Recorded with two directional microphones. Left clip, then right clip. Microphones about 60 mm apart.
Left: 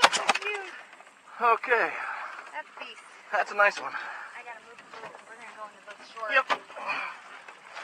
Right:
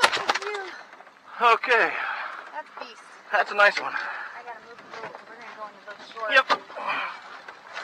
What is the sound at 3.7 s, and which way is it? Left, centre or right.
Speech, centre.